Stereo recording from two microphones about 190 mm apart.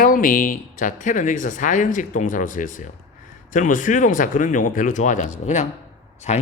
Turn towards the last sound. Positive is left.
turn(degrees=35)  # may be behind; listen again after turning